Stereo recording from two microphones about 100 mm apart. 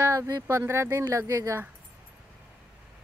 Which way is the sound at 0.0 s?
25° right (ahead or behind).